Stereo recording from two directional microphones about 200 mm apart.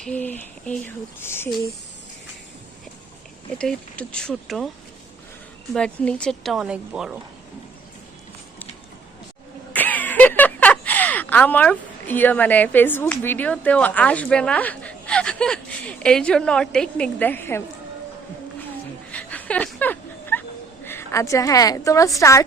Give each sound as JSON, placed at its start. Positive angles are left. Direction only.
{"t": 0.0, "sound": "a woman's voice", "side_deg": 5}
{"t": 3.6, "sound": "speech", "side_deg": 5}
{"t": 5.7, "sound": "speech", "side_deg": 5}
{"t": 9.7, "sound": "speech", "side_deg": 10}
{"t": 19.1, "sound": "a sound", "side_deg": 5}
{"t": 20.8, "sound": "a woman's voice", "side_deg": 15}